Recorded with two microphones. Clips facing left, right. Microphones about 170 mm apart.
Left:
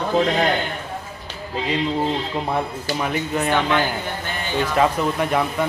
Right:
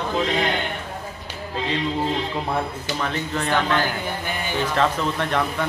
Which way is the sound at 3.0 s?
10° left (ahead or behind).